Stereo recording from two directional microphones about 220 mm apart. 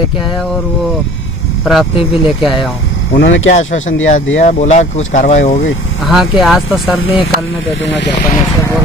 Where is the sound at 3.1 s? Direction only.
55° left (ahead or behind).